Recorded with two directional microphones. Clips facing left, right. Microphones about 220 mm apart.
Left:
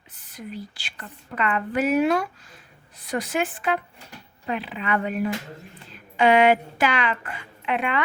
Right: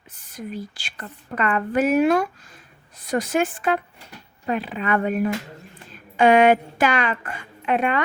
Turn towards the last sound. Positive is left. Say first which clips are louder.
# right 4 dB
turn(degrees=-45)  # may be behind; listen again after turning